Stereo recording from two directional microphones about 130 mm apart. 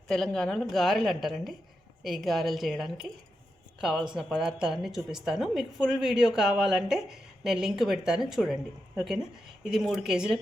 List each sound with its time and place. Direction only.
0.1 s a woman's voice: 5° left (ahead or behind)
9.6 s a woman's voice: centre (ahead or behind)